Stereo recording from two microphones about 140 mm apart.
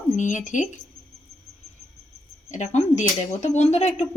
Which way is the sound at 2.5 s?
55° left (ahead or behind).